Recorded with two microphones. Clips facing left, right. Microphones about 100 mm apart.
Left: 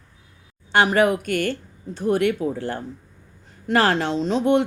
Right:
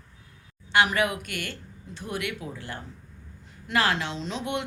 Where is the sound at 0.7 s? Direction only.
40° left (ahead or behind).